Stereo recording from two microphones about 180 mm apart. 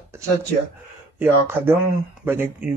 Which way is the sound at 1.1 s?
10° right (ahead or behind).